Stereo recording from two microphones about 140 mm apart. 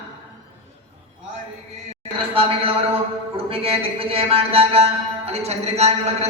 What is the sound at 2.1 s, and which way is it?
A man's voice, 40° right (ahead or behind).